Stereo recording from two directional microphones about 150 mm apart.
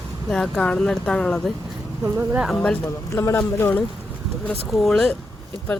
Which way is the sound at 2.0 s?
10° right (ahead or behind).